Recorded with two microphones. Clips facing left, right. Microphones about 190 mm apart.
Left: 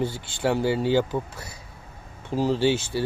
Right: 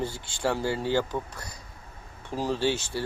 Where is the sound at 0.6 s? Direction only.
70° left (ahead or behind).